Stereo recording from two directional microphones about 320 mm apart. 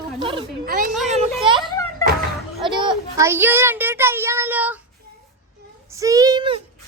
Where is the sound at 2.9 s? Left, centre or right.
Centre.